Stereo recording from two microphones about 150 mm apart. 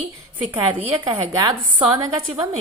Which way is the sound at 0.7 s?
25° right (ahead or behind).